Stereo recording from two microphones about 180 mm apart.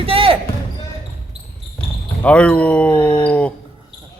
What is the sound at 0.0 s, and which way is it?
Basketball bounce, 30° right (ahead or behind).